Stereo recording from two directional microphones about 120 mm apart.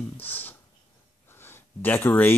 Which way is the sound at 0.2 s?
15° left (ahead or behind).